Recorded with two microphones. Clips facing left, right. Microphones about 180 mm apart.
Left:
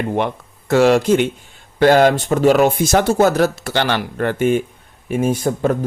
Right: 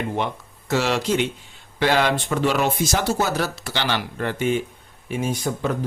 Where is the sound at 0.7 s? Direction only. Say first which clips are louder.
Left 9 dB; 50° left (ahead or behind).